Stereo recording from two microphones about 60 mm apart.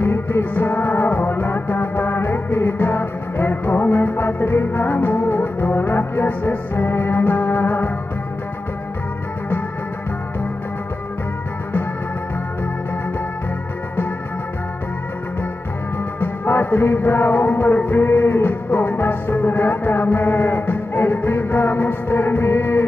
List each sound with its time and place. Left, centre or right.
0.0 s music: left
16.2 s music: left